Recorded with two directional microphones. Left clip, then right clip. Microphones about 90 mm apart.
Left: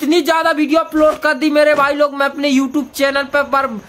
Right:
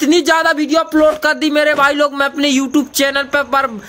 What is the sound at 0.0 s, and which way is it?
Speech, 30° right (ahead or behind).